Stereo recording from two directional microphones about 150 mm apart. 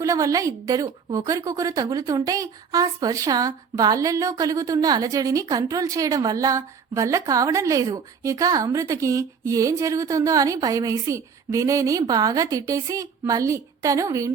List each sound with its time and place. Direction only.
0.0 s a woman's voice: 20° right (ahead or behind)